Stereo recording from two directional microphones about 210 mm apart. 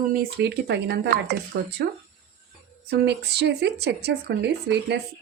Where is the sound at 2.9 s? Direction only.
50° right (ahead or behind).